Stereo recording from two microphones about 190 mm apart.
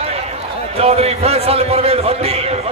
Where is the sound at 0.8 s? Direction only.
30° right (ahead or behind).